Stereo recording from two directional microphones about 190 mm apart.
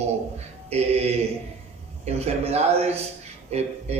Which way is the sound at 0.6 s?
35° right (ahead or behind).